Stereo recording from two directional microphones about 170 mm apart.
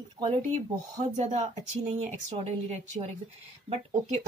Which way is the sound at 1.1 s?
40° right (ahead or behind).